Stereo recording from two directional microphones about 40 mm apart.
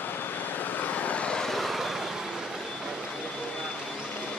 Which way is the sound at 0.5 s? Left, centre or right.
Left.